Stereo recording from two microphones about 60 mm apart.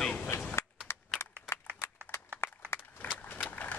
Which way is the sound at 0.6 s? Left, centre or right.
Left.